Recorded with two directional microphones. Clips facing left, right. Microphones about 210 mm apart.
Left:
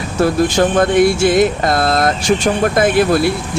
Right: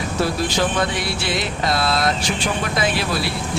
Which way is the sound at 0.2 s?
50° left (ahead or behind).